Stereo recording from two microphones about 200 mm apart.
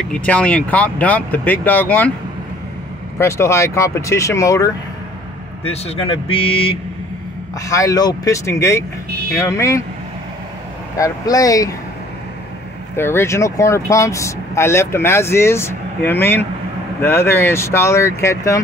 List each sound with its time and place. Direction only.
0.0 s speech: 5° left (ahead or behind)
3.2 s speech: 15° left (ahead or behind)
5.6 s speech: 30° left (ahead or behind)
7.6 s speech: 15° left (ahead or behind)
11.0 s speech: 15° left (ahead or behind)
12.9 s speech: 10° left (ahead or behind)